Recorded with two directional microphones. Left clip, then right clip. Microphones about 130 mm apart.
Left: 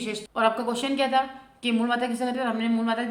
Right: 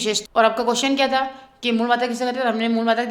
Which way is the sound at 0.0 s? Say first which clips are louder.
Right 7 dB; 40° right (ahead or behind).